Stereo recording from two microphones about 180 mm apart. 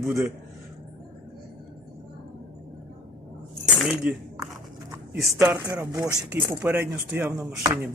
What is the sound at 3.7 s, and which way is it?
Speech, 5° right (ahead or behind).